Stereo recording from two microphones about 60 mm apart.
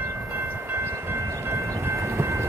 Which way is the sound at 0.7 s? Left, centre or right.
Right.